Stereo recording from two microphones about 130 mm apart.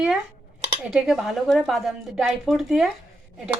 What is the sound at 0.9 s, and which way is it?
A woman's voice, 5° right (ahead or behind).